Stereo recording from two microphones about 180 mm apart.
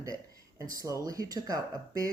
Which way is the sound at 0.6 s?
20° right (ahead or behind).